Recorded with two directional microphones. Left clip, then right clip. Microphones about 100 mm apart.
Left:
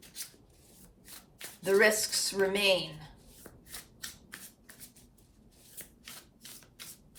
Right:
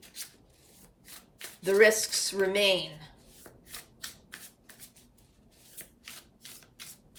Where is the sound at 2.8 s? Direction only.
15° left (ahead or behind).